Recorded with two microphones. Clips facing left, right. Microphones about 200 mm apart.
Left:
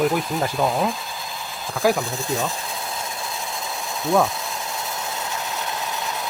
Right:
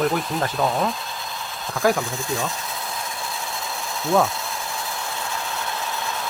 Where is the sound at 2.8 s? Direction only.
25° left (ahead or behind).